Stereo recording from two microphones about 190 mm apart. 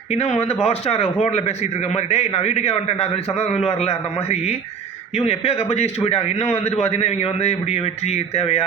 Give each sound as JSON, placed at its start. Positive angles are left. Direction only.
{"t": 0.1, "sound": "a man's voice", "side_deg": 35}